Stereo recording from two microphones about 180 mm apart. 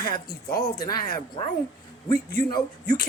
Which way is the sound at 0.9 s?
55° left (ahead or behind).